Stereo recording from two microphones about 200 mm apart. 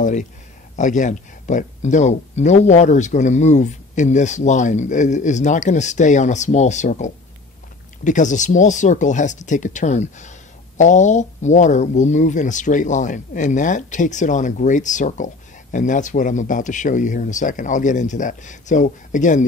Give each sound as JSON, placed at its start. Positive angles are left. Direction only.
{"t": 0.0, "sound": "speech", "side_deg": 40}